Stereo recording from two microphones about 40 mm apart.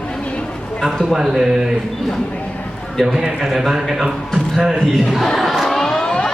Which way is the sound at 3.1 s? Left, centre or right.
Centre.